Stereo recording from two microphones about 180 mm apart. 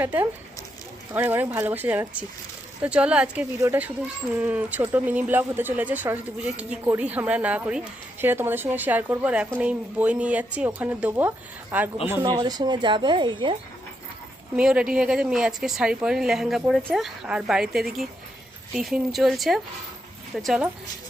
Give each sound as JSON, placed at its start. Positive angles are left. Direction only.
{"t": 0.0, "sound": "speech", "side_deg": -10}
{"t": 12.3, "sound": "speech", "side_deg": -20}
{"t": 14.5, "sound": "a woman's voice", "side_deg": -5}